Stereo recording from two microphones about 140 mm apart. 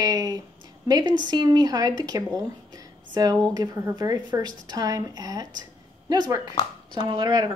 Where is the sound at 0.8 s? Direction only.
30° right (ahead or behind).